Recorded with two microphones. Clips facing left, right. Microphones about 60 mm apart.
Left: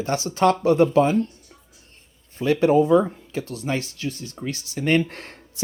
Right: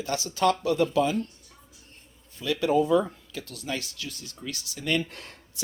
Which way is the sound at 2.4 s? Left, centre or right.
Left.